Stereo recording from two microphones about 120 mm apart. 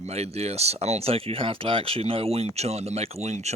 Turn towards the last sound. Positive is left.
turn(degrees=-70)  # may be behind; listen again after turning